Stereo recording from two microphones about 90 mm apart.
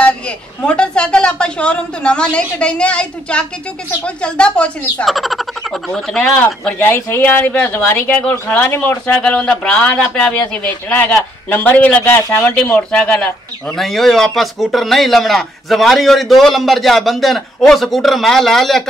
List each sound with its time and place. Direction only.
0.6 s a sound: 10° left (ahead or behind)
4.0 s a man's voice: 10° left (ahead or behind)
5.0 s speech: centre (ahead or behind)
6.8 s speech: 20° left (ahead or behind)
9.2 s a man's voice: 10° left (ahead or behind)